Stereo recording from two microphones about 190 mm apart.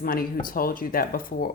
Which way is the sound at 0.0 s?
50° left (ahead or behind).